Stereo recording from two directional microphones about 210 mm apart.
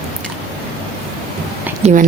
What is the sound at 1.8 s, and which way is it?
Speech, 30° right (ahead or behind).